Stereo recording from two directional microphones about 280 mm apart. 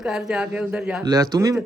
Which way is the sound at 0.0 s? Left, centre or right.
Centre.